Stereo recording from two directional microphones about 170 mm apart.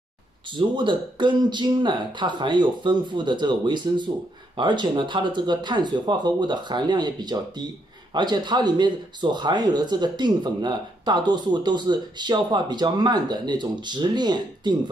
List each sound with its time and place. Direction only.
0.5 s speech: 30° right (ahead or behind)